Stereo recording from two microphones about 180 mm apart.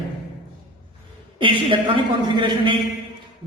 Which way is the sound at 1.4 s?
25° right (ahead or behind).